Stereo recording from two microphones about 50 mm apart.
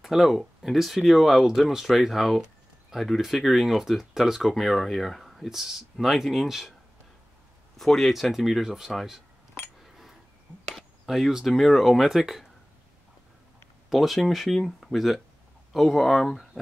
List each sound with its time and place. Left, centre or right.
0.0 s speech: centre
7.7 s speech: centre
10.7 s speech: centre
13.8 s speech: centre